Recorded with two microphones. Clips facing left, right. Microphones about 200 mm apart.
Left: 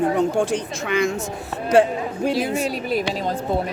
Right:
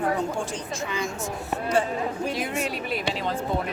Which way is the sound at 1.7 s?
80° left.